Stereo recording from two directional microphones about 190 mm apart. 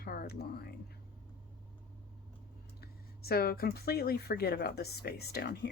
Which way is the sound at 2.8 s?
55° left (ahead or behind).